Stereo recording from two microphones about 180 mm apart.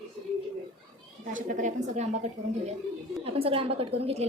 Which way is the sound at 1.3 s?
45° right (ahead or behind).